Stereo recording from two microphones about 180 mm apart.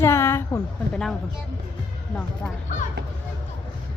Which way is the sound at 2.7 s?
45° left (ahead or behind).